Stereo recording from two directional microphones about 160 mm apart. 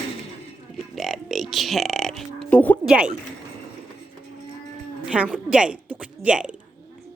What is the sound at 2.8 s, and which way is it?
Speech, 5° right (ahead or behind).